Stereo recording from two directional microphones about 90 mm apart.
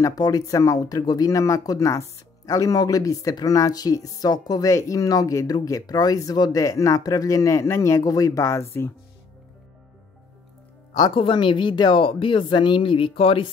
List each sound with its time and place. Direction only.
0.0 s speech: 40° left (ahead or behind)
11.1 s speech: 70° left (ahead or behind); by 13.5 s 90° left